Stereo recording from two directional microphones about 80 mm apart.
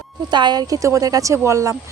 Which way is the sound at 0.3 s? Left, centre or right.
Right.